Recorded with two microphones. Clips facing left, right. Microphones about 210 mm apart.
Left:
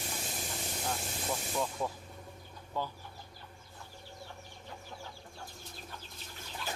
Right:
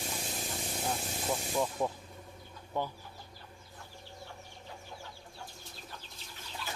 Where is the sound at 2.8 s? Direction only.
20° right (ahead or behind).